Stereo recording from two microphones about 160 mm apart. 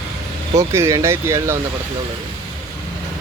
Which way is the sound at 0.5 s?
20° right (ahead or behind).